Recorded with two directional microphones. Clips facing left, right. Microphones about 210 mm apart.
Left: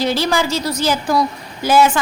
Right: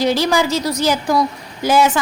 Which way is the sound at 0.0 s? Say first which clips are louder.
Right 2 dB; 15° right (ahead or behind).